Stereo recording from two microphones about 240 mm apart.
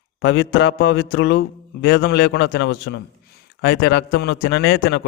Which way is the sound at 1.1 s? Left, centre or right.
Left.